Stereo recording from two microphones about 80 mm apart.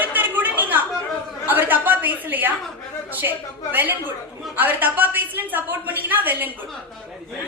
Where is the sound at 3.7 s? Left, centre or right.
Right.